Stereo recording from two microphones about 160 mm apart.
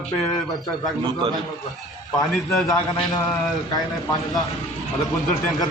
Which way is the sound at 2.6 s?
Centre (ahead or behind).